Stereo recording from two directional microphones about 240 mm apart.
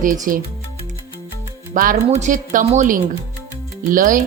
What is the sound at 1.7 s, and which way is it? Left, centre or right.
Speech, right.